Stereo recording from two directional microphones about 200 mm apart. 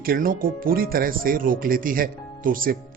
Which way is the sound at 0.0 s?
45° right (ahead or behind).